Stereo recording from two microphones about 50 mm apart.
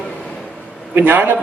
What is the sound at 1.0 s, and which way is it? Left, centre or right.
Speech, right.